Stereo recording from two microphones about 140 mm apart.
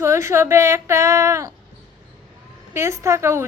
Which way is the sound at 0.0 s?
20° right (ahead or behind).